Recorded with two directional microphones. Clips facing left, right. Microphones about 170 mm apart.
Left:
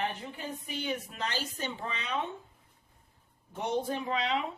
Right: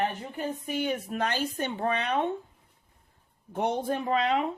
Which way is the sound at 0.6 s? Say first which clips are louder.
Right 4 dB; 50° right (ahead or behind).